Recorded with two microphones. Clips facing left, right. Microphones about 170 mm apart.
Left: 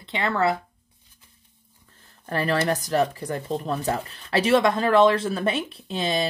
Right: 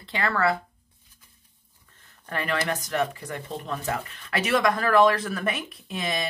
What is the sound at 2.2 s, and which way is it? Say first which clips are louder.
Speech: left 5 dB; 35° left (ahead or behind).